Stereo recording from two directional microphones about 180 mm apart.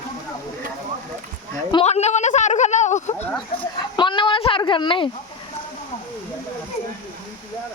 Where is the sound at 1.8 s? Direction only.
40° left (ahead or behind).